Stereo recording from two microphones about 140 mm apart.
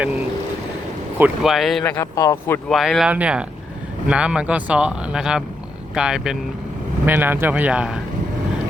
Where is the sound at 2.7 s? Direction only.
Centre (ahead or behind).